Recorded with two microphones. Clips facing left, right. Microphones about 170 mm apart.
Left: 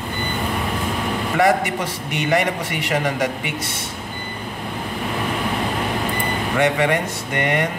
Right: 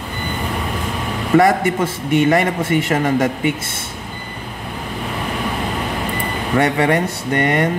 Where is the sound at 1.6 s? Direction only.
50° right (ahead or behind).